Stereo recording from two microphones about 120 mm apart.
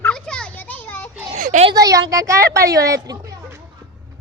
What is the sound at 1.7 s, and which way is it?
Speech, 30° right (ahead or behind).